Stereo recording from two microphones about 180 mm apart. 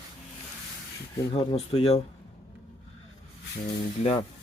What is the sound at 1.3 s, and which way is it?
Speech, 35° left (ahead or behind).